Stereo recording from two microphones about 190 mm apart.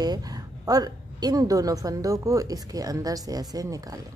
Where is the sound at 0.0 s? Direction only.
20° right (ahead or behind).